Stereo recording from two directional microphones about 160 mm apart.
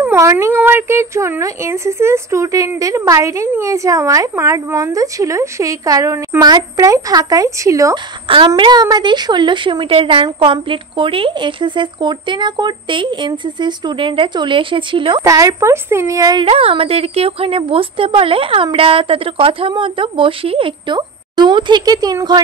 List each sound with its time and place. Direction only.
0.0 s a woman's voice: 15° right (ahead or behind); by 15.2 s 30° right (ahead or behind)
15.2 s speech: 20° right (ahead or behind)
16.4 s a woman's voice: 35° right (ahead or behind)